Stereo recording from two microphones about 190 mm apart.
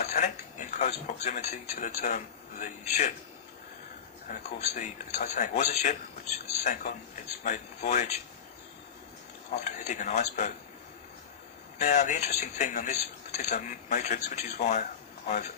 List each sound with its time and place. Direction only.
0.0 s speech: 40° left (ahead or behind)
4.3 s speech: 35° left (ahead or behind)
9.5 s speech: 40° left (ahead or behind)
11.8 s speech: 40° left (ahead or behind)